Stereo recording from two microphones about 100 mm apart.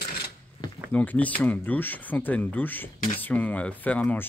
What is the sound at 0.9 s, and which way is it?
Speech, 15° left (ahead or behind).